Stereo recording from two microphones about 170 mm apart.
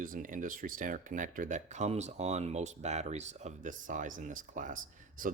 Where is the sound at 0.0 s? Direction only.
50° right (ahead or behind).